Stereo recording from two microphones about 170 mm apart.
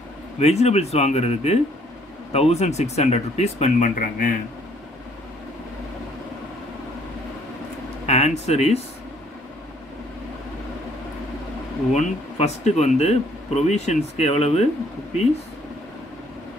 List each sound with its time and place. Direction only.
0.4 s speech: 40° left (ahead or behind)
8.1 s speech: 40° left (ahead or behind)
11.9 s speech: 40° left (ahead or behind)